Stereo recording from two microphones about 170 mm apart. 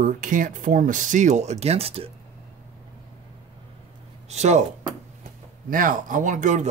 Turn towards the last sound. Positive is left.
turn(degrees=-45)  # may be behind; listen again after turning